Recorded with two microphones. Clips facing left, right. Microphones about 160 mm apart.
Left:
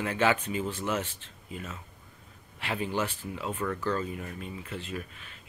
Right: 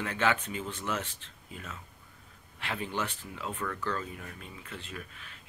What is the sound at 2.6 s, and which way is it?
Speech, 5° left (ahead or behind).